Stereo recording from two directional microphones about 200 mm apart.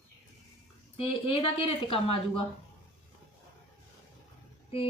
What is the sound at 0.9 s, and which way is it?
A woman's voice, 25° left (ahead or behind).